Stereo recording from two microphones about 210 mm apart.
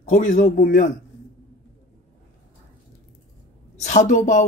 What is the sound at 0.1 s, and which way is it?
Speech, 45° left (ahead or behind).